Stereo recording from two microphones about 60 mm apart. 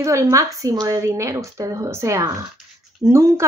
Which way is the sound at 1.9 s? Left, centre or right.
Right.